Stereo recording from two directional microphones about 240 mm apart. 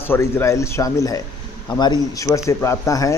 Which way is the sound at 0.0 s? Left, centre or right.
Centre.